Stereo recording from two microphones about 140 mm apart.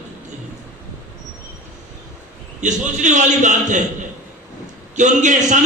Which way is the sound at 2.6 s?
60° right (ahead or behind).